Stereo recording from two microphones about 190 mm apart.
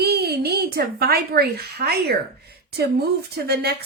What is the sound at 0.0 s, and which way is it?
A woman's voice, 55° right (ahead or behind).